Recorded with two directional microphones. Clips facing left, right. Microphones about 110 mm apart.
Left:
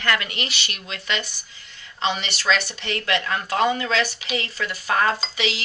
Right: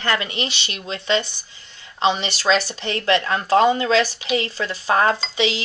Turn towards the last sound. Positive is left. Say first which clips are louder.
# right 4 dB
turn(degrees=-30)  # may be behind; listen again after turning